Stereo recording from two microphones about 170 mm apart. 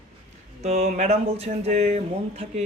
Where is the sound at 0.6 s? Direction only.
40° right (ahead or behind).